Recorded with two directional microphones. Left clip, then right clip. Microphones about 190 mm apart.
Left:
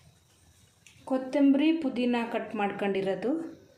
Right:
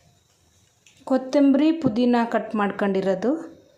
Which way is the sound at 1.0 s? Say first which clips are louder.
Right 6 dB; 40° right (ahead or behind).